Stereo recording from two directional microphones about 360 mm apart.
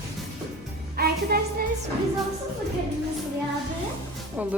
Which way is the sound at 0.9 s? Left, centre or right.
Right.